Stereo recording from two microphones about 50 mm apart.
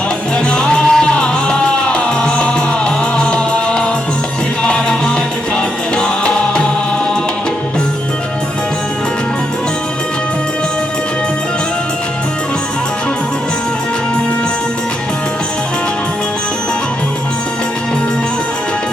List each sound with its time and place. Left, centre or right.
0.5 s music: centre
6.0 s music: centre